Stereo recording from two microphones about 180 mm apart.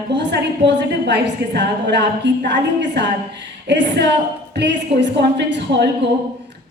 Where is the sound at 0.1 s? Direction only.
75° right (ahead or behind).